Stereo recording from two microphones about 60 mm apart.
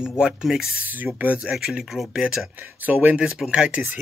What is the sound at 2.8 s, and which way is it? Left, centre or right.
Speech, right.